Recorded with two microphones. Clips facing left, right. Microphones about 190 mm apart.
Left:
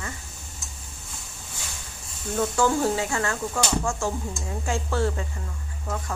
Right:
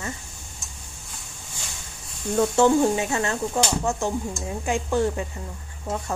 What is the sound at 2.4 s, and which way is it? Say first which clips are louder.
A woman's voice: right 5 dB; 20° right (ahead or behind).